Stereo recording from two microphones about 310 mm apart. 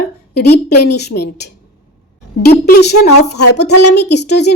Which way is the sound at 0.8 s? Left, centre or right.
Left.